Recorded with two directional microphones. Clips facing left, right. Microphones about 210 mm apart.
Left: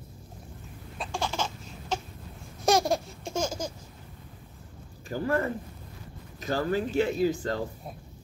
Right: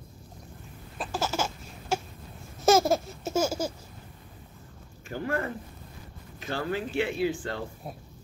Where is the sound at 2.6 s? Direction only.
Centre (ahead or behind).